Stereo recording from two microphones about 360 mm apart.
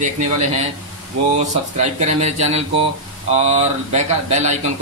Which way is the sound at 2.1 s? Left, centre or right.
Centre.